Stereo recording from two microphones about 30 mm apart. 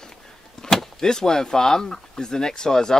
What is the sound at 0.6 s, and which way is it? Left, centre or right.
Speech, centre.